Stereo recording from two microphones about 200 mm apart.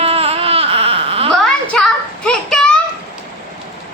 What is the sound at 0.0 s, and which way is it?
Baby cry, 30° right (ahead or behind).